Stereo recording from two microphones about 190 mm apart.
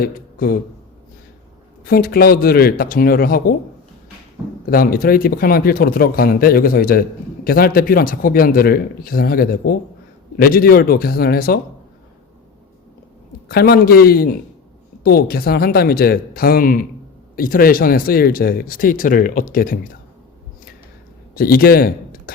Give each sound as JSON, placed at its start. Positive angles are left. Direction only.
{"t": 0.0, "sound": "speech", "side_deg": 50}
{"t": 1.8, "sound": "speech", "side_deg": 50}
{"t": 4.6, "sound": "speech", "side_deg": 50}
{"t": 13.5, "sound": "speech", "side_deg": 55}
{"t": 21.3, "sound": "speech", "side_deg": 50}